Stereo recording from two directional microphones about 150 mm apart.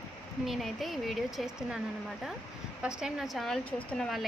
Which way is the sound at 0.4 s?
Centre (ahead or behind).